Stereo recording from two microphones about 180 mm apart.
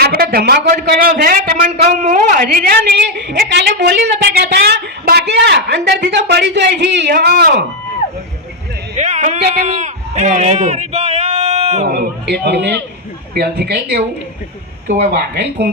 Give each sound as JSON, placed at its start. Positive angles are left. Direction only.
{"t": 0.0, "sound": "a man's voice", "side_deg": -60}
{"t": 9.0, "sound": "a sound", "side_deg": -40}
{"t": 9.6, "sound": "a man's voice", "side_deg": -40}
{"t": 11.9, "sound": "a man's voice", "side_deg": -60}
{"t": 15.1, "sound": "a man's voice", "side_deg": -65}